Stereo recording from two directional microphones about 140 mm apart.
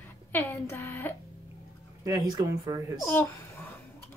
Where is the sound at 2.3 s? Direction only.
30° right (ahead or behind).